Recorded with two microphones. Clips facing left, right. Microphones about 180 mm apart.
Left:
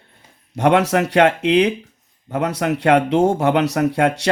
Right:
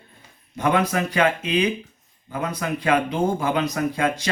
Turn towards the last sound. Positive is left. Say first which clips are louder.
# left 6 dB
turn(degrees=70)  # may be behind; listen again after turning